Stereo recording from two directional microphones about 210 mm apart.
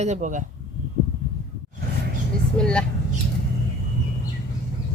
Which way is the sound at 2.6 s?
5° left (ahead or behind).